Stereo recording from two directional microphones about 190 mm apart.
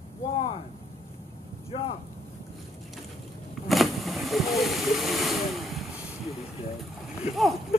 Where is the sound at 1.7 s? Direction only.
30° left (ahead or behind).